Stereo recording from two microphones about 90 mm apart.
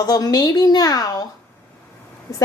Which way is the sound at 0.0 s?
45° left (ahead or behind).